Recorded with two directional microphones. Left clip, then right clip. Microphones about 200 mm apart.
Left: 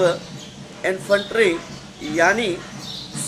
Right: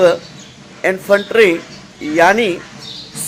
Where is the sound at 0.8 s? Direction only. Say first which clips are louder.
Right 6 dB; 35° right (ahead or behind).